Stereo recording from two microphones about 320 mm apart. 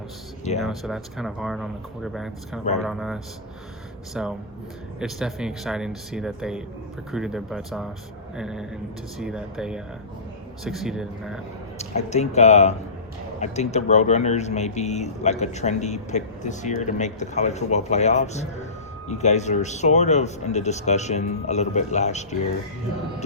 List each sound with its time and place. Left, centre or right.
0.6 s speech: centre
11.8 s speech: left